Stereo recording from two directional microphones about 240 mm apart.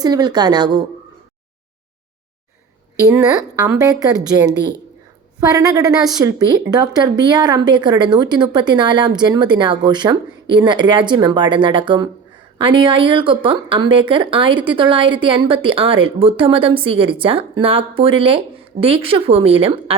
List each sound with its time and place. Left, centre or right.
0.0 s a woman's voice: centre
3.1 s a woman's voice: centre